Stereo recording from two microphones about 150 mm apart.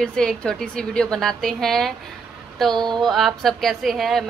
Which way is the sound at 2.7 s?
30° right (ahead or behind).